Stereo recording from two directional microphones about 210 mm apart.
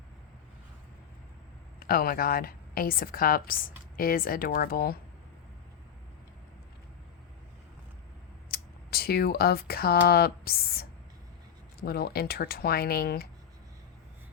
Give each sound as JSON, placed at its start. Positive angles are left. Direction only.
{"t": 1.8, "sound": "a woman's voice", "side_deg": 45}
{"t": 8.4, "sound": "a woman's voice", "side_deg": 45}